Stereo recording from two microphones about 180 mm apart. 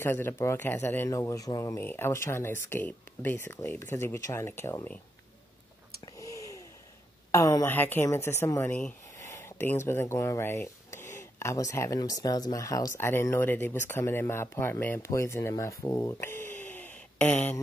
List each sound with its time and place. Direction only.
0.0 s speech: 10° left (ahead or behind)
6.1 s a sound: 20° left (ahead or behind)
7.2 s speech: 15° left (ahead or behind)